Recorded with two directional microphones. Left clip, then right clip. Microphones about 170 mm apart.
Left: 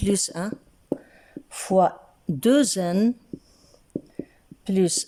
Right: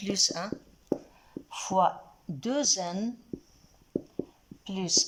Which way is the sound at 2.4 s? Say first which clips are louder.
Left 8 dB; 55° left (ahead or behind).